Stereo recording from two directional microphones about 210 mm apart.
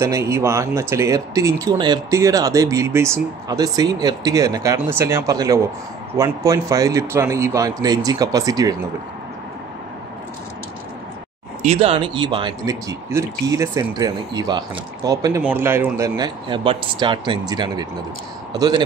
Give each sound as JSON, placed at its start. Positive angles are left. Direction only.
{"t": 0.0, "sound": "speech", "side_deg": -15}
{"t": 11.6, "sound": "speech", "side_deg": -30}